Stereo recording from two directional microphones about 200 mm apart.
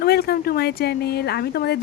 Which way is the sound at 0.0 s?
50° left (ahead or behind).